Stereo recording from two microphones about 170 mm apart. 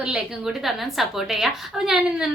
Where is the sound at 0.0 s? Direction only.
5° right (ahead or behind).